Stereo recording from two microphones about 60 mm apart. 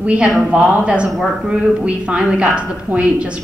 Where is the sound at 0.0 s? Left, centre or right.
Centre.